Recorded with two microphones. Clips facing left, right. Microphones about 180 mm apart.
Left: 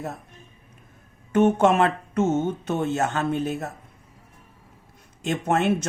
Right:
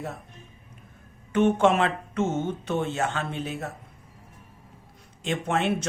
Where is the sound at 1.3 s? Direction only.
45° left (ahead or behind).